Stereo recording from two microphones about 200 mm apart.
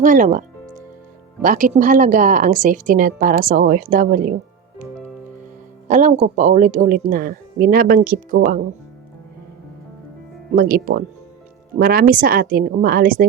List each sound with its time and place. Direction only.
0.0 s a woman's voice: 40° right (ahead or behind)
5.9 s speech: 40° right (ahead or behind)
10.5 s speech: 45° right (ahead or behind)